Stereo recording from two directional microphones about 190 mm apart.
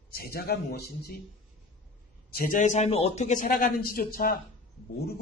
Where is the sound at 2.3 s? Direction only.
45° left (ahead or behind).